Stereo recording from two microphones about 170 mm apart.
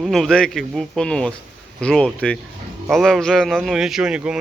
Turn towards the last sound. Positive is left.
turn(degrees=-5)  # may be behind; listen again after turning